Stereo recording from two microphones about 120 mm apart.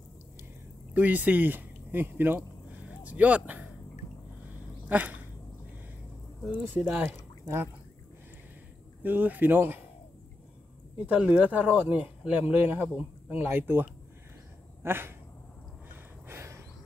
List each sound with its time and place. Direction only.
0.9 s speech: 15° right (ahead or behind)
4.8 s dog: 15° right (ahead or behind)
6.7 s speech: 15° right (ahead or behind)
9.0 s speech: 15° right (ahead or behind)
11.1 s speech: 10° right (ahead or behind)
14.8 s a sound: 20° right (ahead or behind)
15.9 s gasp: 20° right (ahead or behind)